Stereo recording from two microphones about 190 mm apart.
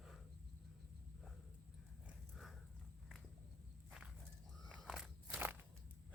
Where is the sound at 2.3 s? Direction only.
Centre (ahead or behind).